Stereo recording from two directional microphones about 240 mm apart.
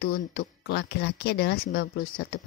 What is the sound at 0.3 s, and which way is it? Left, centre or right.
Speech, left.